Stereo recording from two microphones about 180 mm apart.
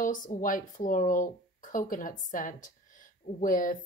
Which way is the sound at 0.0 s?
45° left (ahead or behind).